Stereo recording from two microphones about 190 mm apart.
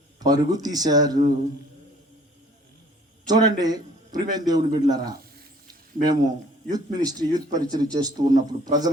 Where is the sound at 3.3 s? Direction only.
20° right (ahead or behind).